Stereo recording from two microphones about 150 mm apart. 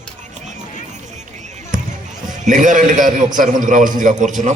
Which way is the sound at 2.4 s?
60° right (ahead or behind).